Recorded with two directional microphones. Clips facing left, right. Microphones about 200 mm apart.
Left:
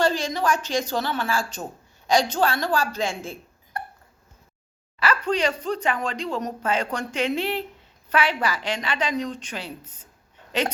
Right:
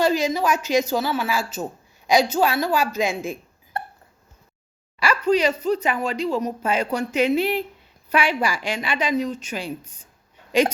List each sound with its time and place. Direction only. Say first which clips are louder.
0.0 s speech: right 3 dB; 10° right (ahead or behind)
3.7 s hiccup: right 3 dB; 25° right (ahead or behind)
4.9 s speech: right 4 dB; 10° right (ahead or behind)